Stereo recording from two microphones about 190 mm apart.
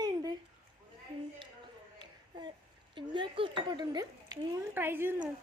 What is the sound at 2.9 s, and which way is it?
Cutlery, 25° right (ahead or behind).